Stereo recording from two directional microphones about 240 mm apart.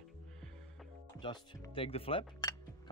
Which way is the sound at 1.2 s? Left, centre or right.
Left.